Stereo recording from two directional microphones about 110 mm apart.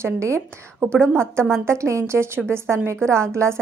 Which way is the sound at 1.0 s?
10° left (ahead or behind).